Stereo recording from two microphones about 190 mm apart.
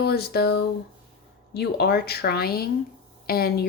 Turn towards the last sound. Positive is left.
turn(degrees=55)  # may be behind; listen again after turning